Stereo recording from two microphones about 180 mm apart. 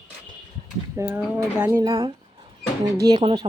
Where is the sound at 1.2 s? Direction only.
10° right (ahead or behind).